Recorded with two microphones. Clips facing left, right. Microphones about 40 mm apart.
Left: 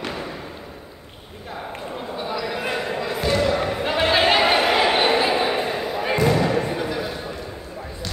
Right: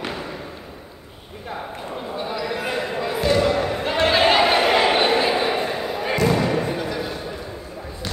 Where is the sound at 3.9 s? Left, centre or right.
Centre.